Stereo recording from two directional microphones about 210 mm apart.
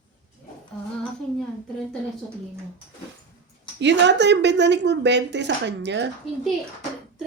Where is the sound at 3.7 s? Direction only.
55° right (ahead or behind).